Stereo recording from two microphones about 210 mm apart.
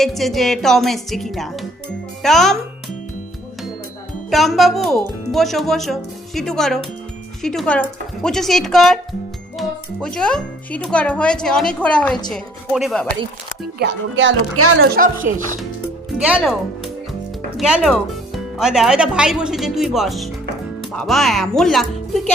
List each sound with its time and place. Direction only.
0.0 s speech: centre (ahead or behind)
4.3 s speech: centre (ahead or behind)
10.2 s speech: 5° left (ahead or behind)
13.7 s a woman's voice: 60° right (ahead or behind); by 14.7 s 75° right (ahead or behind)
14.8 s speech: 45° right (ahead or behind)
16.0 s speech: 5° right (ahead or behind)